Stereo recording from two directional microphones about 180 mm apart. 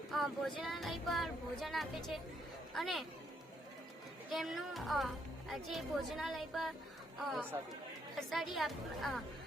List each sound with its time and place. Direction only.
0.1 s a woman's voice: centre (ahead or behind)
4.3 s a woman's voice: centre (ahead or behind)